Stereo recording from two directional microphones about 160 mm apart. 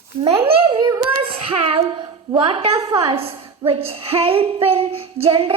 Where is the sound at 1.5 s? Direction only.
35° right (ahead or behind).